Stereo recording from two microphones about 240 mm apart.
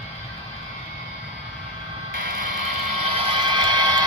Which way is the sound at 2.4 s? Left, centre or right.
Right.